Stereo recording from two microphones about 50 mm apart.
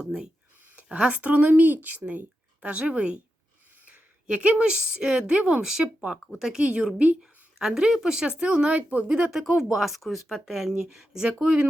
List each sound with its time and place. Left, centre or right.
0.0 s speech: centre
3.8 s a sound: right
4.7 s speech: centre
9.3 s speech: centre